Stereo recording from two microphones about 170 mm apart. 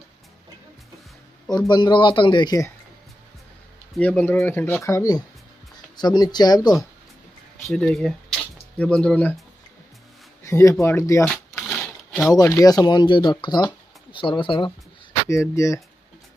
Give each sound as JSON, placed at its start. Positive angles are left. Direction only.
{"t": 1.7, "sound": "speech", "side_deg": 25}
{"t": 3.9, "sound": "speech", "side_deg": 5}
{"t": 7.6, "sound": "speech", "side_deg": 5}
{"t": 10.4, "sound": "speech", "side_deg": 20}
{"t": 11.2, "sound": "a sound", "side_deg": 10}
{"t": 12.4, "sound": "speech", "side_deg": 20}
{"t": 15.2, "sound": "speech", "side_deg": 15}